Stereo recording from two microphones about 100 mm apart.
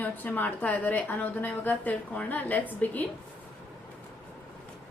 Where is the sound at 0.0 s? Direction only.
20° left (ahead or behind).